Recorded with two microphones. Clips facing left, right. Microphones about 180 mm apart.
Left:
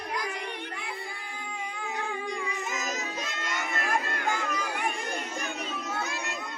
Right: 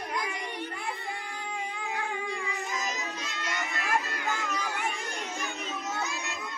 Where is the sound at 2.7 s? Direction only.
50° left (ahead or behind).